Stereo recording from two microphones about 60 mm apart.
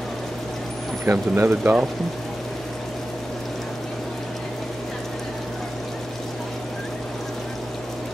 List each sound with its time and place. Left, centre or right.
1.0 s speech: right